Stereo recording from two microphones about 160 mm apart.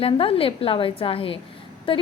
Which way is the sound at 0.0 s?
35° left (ahead or behind).